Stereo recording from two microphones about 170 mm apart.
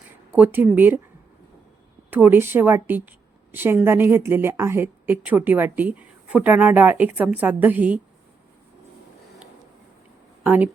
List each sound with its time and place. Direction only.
0.3 s a woman's voice: 10° right (ahead or behind)
2.0 s a woman's voice: 10° right (ahead or behind)
10.4 s speech: 10° right (ahead or behind)